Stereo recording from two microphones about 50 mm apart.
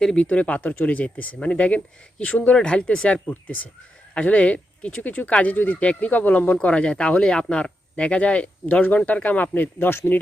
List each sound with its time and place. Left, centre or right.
0.2 s speech: left
3.2 s speech: left
5.0 s speech: left
9.7 s speech: left